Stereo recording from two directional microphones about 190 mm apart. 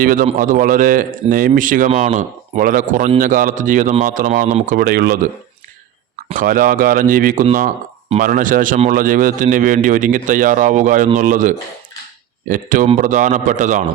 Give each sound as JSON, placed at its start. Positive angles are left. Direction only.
{"t": 0.0, "sound": "a man's voice", "side_deg": -45}
{"t": 6.3, "sound": "a man's voice", "side_deg": -45}